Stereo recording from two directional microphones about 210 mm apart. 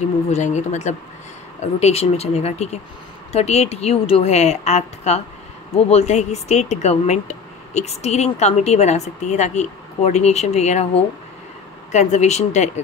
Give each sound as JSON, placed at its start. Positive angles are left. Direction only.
{"t": 0.3, "sound": "speech", "side_deg": 35}